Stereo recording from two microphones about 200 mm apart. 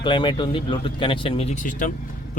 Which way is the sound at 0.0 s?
25° left (ahead or behind).